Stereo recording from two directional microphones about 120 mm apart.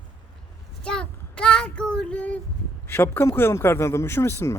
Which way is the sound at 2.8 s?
20° left (ahead or behind).